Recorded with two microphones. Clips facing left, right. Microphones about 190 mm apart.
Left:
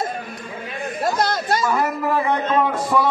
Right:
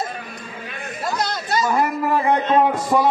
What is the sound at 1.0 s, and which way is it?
Chatter, 55° left (ahead or behind).